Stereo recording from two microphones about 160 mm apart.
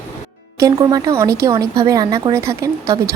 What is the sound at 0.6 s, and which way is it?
A woman's voice, 20° right (ahead or behind).